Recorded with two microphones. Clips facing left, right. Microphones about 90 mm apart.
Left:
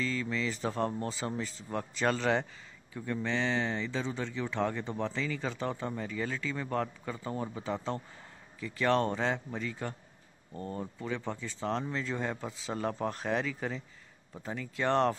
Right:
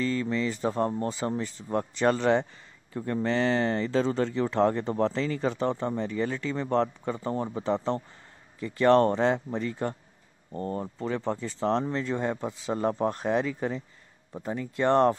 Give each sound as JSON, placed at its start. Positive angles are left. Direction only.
{"t": 0.0, "sound": "speech", "side_deg": -45}
{"t": 0.3, "sound": "speech", "side_deg": -35}
{"t": 2.9, "sound": "speech", "side_deg": -40}
{"t": 5.6, "sound": "speech", "side_deg": -30}
{"t": 13.5, "sound": "speech", "side_deg": -25}